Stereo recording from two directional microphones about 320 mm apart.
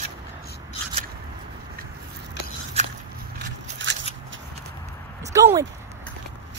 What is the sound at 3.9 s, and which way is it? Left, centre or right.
Scissors, right.